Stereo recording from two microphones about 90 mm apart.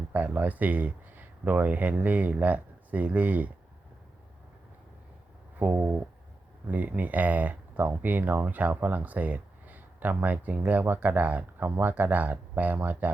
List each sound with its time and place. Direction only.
0.1 s speech: 20° right (ahead or behind)
5.5 s speech: 20° right (ahead or behind)